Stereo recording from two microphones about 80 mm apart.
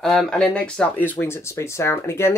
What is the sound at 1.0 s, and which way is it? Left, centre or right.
Speech, left.